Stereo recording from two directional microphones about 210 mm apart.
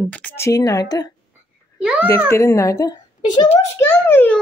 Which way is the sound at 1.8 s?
5° right (ahead or behind).